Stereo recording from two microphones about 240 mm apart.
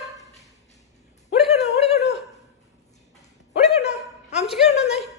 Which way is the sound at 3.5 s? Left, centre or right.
Left.